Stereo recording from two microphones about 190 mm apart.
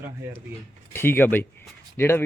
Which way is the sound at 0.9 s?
10° left (ahead or behind).